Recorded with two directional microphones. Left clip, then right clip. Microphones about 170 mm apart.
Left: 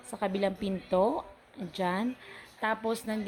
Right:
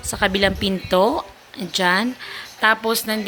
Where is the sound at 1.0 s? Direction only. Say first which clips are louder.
Right 9 dB; 25° right (ahead or behind).